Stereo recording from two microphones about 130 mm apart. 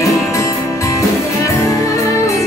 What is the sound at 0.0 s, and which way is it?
Music, 25° left (ahead or behind).